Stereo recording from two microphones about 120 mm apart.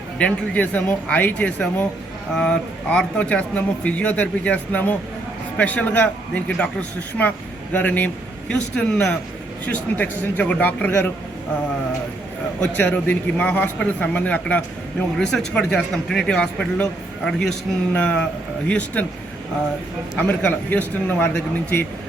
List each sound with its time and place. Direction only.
0.2 s speech: 10° left (ahead or behind)
12.7 s speech: 15° left (ahead or behind)
20.1 s speech: 15° left (ahead or behind)